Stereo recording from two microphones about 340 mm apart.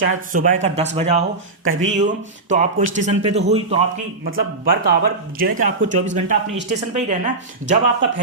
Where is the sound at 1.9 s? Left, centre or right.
Right.